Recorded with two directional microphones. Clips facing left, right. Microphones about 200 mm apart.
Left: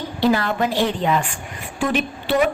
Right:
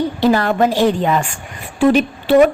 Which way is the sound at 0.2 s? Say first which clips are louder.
Right 3 dB; 45° right (ahead or behind).